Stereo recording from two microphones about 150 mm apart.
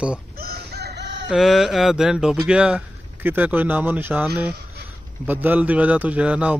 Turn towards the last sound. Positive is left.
turn(degrees=-10)  # may be behind; listen again after turning